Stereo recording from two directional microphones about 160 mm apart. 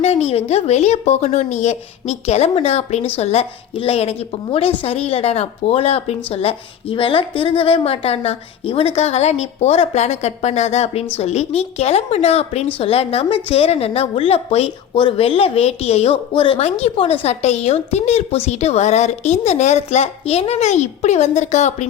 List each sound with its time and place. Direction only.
0.0 s a woman's voice: 45° left (ahead or behind)